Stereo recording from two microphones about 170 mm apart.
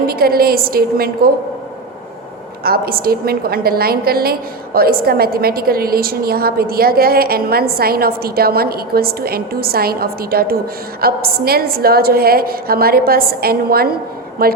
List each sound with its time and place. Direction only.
0.1 s a woman's voice: 60° right (ahead or behind)
2.6 s a woman's voice: 60° right (ahead or behind)